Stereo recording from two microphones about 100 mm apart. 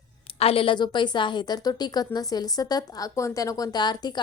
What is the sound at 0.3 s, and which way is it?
A woman's voice, 75° left (ahead or behind).